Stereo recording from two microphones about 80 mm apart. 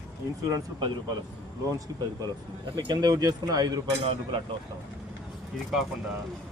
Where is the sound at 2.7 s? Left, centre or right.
Right.